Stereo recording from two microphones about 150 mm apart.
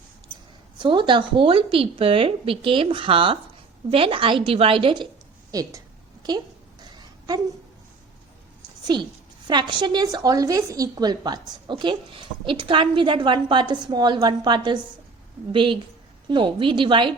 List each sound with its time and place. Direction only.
0.8 s a woman's voice: 30° right (ahead or behind)
5.5 s a woman's voice: 25° right (ahead or behind)
8.9 s a woman's voice: 30° right (ahead or behind)